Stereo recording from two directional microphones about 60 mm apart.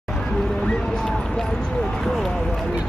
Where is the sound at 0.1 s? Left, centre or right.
Centre.